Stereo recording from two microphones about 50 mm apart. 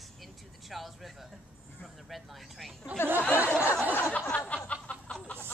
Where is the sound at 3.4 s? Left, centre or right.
Right.